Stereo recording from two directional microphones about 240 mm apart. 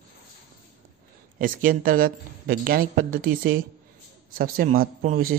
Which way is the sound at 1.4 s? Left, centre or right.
Right.